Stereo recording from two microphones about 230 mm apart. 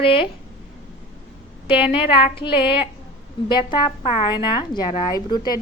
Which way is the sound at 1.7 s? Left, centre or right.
Left.